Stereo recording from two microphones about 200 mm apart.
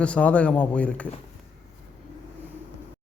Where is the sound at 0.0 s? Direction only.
5° left (ahead or behind).